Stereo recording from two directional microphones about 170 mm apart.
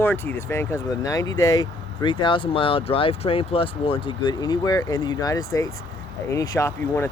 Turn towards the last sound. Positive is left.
turn(degrees=15)  # may be behind; listen again after turning